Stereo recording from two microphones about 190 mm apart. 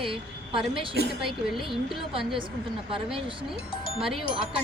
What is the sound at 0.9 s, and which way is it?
Speech, 60° right (ahead or behind).